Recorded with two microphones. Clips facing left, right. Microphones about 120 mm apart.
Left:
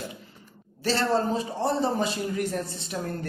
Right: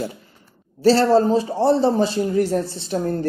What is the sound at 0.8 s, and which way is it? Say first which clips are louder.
A man's voice: right 10 dB; 35° right (ahead or behind).